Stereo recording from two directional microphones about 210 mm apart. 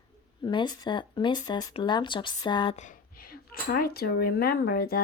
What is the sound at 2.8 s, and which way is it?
Speech, 40° left (ahead or behind).